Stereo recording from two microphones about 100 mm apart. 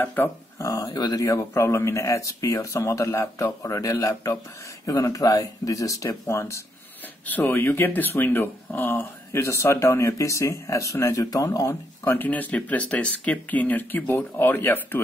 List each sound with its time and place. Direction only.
0.0 s speech: 20° left (ahead or behind)
0.6 s speech: 30° left (ahead or behind)
0.8 s speech: 40° left (ahead or behind)
12.0 s speech: 20° left (ahead or behind)